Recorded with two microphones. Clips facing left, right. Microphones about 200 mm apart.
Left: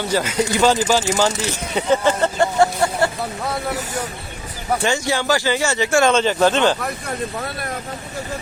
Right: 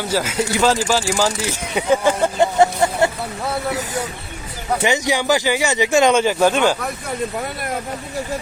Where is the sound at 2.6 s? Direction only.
20° right (ahead or behind).